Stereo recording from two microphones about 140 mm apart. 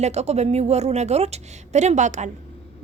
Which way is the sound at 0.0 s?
50° right (ahead or behind).